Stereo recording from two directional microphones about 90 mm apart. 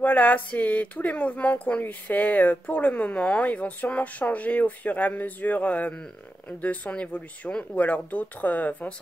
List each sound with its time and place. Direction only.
0.0 s speech: 20° left (ahead or behind)